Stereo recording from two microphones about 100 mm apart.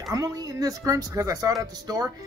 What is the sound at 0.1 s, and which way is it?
Speech, 35° right (ahead or behind).